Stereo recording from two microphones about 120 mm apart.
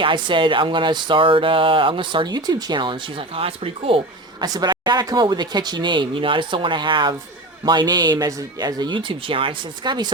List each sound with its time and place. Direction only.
0.0 s speech: 45° right (ahead or behind)
4.4 s speech: 35° right (ahead or behind)